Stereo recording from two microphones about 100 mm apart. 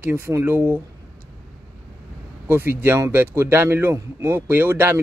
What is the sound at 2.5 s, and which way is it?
Speech, 20° right (ahead or behind).